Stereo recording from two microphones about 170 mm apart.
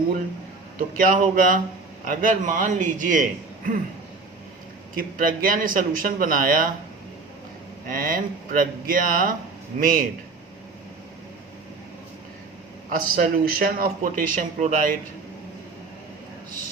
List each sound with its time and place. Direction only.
0.9 s a man's voice: 50° right (ahead or behind)
4.9 s speech: 55° right (ahead or behind)
7.9 s a man's voice: 55° right (ahead or behind)
13.0 s speech: 55° right (ahead or behind)